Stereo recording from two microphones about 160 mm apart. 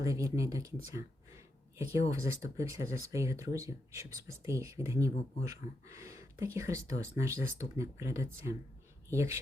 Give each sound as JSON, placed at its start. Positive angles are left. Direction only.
{"t": 0.0, "sound": "speech", "side_deg": -20}
{"t": 2.0, "sound": "speech", "side_deg": -20}